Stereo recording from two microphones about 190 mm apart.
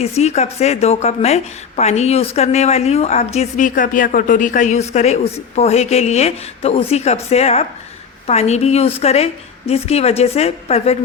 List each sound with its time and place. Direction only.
0.2 s a woman's voice: 35° left (ahead or behind)